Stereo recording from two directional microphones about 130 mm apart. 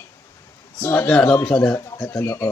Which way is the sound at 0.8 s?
15° left (ahead or behind).